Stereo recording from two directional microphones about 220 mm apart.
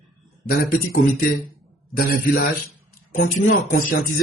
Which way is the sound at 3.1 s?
35° left (ahead or behind).